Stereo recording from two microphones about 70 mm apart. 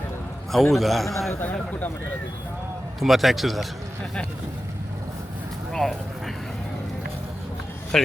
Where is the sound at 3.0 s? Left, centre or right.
Centre.